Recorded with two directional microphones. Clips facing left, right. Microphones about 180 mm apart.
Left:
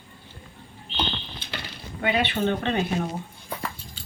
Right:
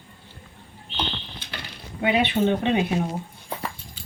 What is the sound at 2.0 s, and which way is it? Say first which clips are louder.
Speech: right 3 dB; 15° right (ahead or behind).